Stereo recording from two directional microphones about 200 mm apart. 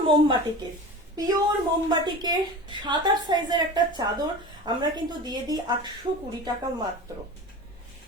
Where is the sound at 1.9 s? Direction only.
20° right (ahead or behind).